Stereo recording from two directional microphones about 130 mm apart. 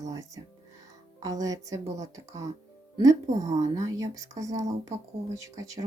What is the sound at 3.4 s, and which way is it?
Speech, 65° right (ahead or behind).